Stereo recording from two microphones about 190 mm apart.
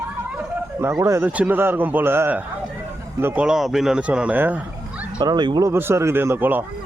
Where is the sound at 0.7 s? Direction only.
15° right (ahead or behind).